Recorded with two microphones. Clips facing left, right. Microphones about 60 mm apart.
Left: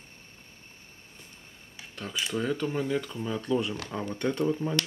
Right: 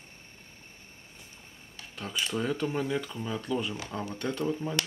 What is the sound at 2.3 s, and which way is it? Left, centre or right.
Speech, centre.